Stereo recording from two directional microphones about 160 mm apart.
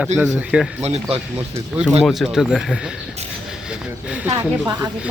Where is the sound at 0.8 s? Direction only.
45° right (ahead or behind).